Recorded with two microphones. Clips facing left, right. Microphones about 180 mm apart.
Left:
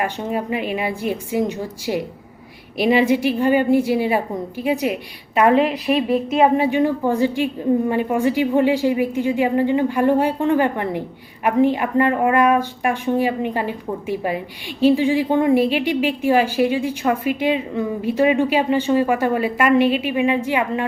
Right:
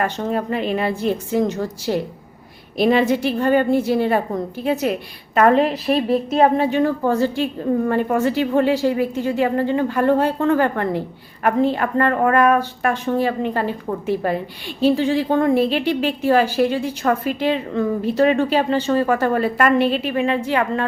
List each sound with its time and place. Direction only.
0.0 s speech: 10° left (ahead or behind)